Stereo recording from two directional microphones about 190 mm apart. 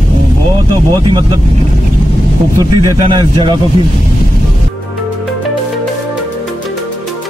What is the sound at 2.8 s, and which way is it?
Speech, 20° right (ahead or behind).